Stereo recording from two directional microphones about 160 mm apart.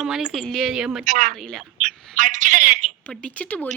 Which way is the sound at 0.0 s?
5° right (ahead or behind).